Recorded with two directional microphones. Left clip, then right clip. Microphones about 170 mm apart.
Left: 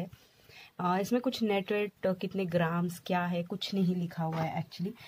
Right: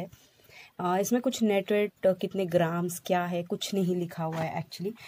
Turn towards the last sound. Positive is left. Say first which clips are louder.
# right 2 dB
turn(degrees=-40)  # may be behind; listen again after turning